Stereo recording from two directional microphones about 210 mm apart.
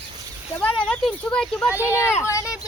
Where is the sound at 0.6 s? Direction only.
5° left (ahead or behind).